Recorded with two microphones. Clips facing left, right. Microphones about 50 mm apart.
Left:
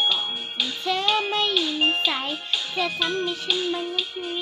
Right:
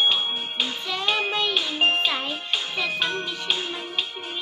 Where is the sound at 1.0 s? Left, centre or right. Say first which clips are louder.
Right 1 dB; right.